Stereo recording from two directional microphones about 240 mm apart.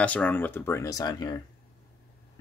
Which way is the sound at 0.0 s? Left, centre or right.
Centre.